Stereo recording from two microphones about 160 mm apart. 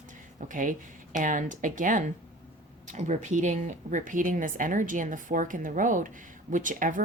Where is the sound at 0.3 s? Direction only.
55° right (ahead or behind).